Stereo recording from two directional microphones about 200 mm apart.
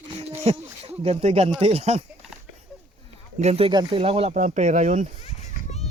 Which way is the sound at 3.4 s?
30° right (ahead or behind).